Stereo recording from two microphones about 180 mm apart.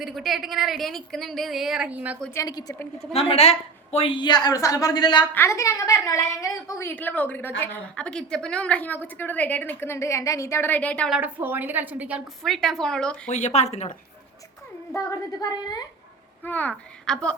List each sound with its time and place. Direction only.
0.0 s a woman's voice: centre (ahead or behind)
2.3 s a woman's voice: 20° left (ahead or behind)
3.1 s a woman's voice: 35° left (ahead or behind); by 11.2 s 5° left (ahead or behind)
11.2 s a woman's voice: 10° right (ahead or behind)
13.2 s speech: 40° left (ahead or behind)
14.9 s a woman's voice: 20° left (ahead or behind)
16.4 s a child's voice: 10° left (ahead or behind)